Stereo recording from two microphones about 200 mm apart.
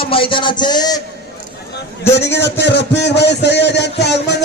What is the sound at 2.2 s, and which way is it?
A man's voice, 60° left (ahead or behind).